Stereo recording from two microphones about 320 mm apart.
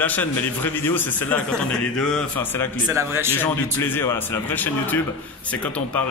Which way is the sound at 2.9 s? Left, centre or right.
Centre.